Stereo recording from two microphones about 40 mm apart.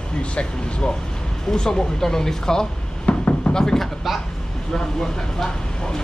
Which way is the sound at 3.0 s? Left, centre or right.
Left.